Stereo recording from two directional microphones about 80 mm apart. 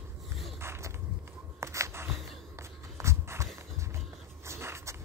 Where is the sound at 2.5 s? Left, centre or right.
Right.